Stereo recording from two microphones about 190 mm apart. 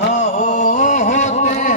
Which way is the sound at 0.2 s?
40° left (ahead or behind).